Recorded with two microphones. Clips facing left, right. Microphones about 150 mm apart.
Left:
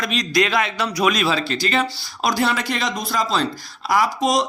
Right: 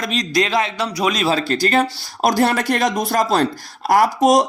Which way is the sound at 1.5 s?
45° right (ahead or behind).